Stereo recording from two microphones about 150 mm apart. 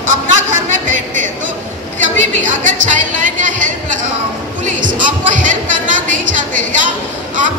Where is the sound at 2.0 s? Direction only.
55° right (ahead or behind).